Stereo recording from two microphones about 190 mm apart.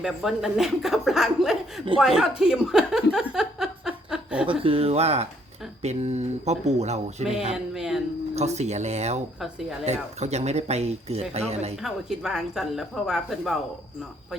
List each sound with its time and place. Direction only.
0.0 s speech: centre (ahead or behind)
2.4 s a sound: 5° right (ahead or behind)
4.6 s speech: 30° right (ahead or behind)
7.5 s speech: 5° right (ahead or behind)
8.4 s speech: 35° right (ahead or behind)
9.4 s speech: centre (ahead or behind)
9.8 s speech: 35° right (ahead or behind)
11.8 s speech: centre (ahead or behind)